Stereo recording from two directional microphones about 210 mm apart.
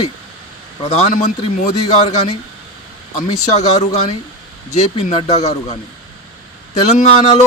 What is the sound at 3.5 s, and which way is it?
Speech, 30° left (ahead or behind).